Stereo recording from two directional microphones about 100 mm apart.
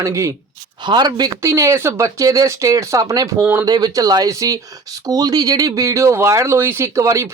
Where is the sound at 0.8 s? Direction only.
50° right (ahead or behind).